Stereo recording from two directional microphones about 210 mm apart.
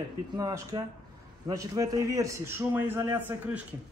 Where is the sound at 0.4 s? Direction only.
15° right (ahead or behind).